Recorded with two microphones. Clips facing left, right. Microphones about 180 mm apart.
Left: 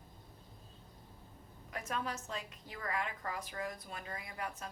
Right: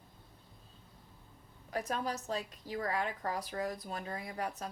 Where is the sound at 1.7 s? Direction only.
35° right (ahead or behind).